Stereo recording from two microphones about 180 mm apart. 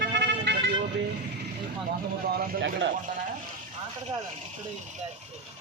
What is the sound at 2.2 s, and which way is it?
Speech, 55° right (ahead or behind).